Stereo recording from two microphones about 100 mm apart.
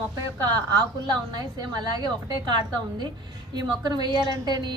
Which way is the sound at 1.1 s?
45° right (ahead or behind).